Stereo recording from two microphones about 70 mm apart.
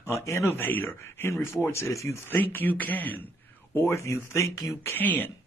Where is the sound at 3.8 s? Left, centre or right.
Left.